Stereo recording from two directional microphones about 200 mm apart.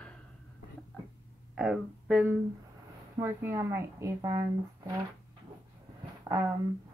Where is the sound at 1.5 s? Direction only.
5° right (ahead or behind).